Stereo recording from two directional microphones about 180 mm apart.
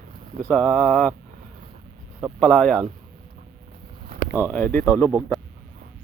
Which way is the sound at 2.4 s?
5° left (ahead or behind).